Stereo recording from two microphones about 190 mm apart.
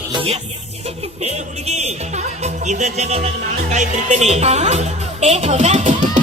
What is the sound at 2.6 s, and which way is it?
Music, 40° right (ahead or behind).